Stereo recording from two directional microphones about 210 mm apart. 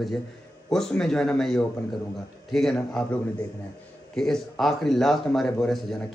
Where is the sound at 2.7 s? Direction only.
5° left (ahead or behind).